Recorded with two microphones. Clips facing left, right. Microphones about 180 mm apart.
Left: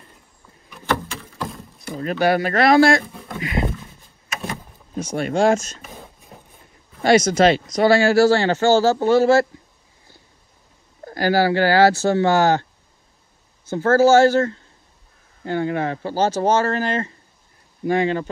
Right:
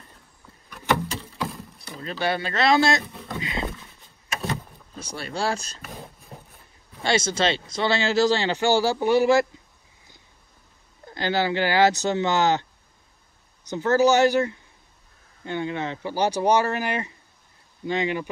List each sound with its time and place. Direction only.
2.1 s speech: 25° right (ahead or behind)
3.1 s dog: 5° left (ahead or behind)
3.3 s speech: 25° right (ahead or behind)
5.1 s speech: 35° right (ahead or behind)
5.9 s a sound: centre (ahead or behind)
7.0 s speech: 25° right (ahead or behind)
11.1 s speech: 20° right (ahead or behind)
13.7 s speech: 20° right (ahead or behind)